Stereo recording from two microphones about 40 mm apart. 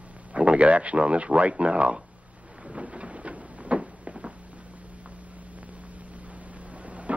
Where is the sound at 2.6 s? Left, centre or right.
Right.